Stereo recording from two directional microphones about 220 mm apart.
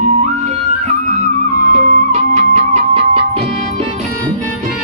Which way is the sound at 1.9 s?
35° right (ahead or behind).